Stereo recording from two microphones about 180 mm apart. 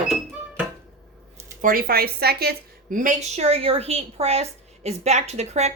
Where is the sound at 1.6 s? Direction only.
55° right (ahead or behind).